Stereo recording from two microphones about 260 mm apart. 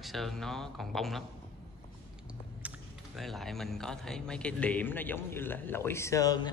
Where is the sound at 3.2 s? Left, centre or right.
Centre.